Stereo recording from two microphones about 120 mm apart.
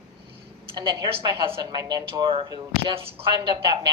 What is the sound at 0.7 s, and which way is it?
A woman's voice, 40° right (ahead or behind).